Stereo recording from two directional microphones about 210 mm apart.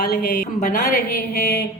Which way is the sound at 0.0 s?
45° left (ahead or behind).